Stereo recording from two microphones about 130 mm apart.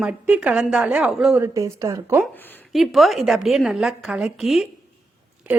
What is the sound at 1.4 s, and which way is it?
Speech, 25° right (ahead or behind).